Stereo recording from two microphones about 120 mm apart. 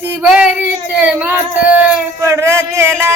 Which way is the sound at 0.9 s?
15° right (ahead or behind).